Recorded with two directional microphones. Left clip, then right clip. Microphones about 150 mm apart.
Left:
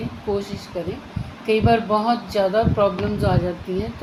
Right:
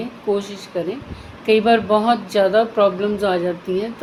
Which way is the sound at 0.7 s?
35° right (ahead or behind).